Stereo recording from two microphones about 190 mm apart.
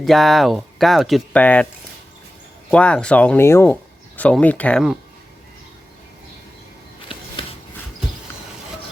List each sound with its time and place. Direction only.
0.0 s speech: centre (ahead or behind)
2.6 s speech: 5° left (ahead or behind)
7.1 s a sound: 25° left (ahead or behind)